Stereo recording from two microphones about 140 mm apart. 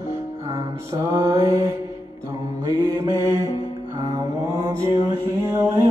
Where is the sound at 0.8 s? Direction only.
20° right (ahead or behind).